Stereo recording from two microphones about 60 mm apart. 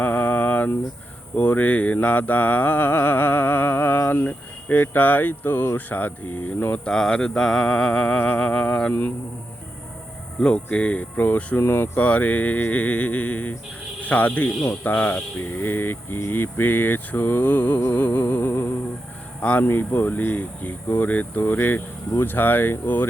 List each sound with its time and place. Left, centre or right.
0.0 s a sound: left
1.4 s mantra: left
6.8 s mantra: centre
10.4 s speech: centre; by 12.0 s left
12.0 s speech: left
15.4 s mantra: left
19.4 s speech: left
19.6 s mantra: left